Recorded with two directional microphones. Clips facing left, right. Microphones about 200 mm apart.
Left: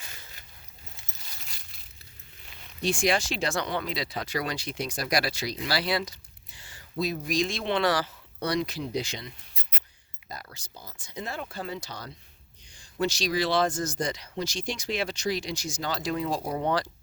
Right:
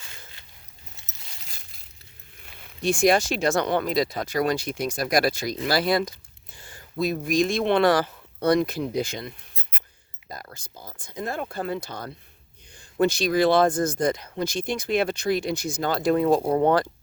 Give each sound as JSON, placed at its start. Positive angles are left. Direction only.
{"t": 2.8, "sound": "speech", "side_deg": -45}
{"t": 10.5, "sound": "speech", "side_deg": -55}